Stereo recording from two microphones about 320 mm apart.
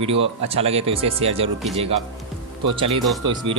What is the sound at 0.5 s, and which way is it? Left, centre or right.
Speech, centre.